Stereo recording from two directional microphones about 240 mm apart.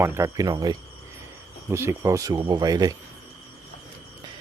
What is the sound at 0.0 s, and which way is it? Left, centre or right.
Speech, centre.